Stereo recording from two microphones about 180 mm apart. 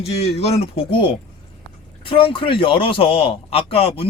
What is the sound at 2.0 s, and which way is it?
A man's voice, 30° left (ahead or behind).